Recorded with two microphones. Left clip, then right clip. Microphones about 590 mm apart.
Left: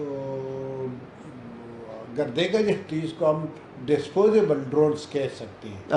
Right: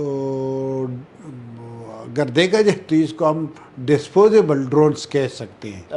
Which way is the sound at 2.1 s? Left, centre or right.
Right.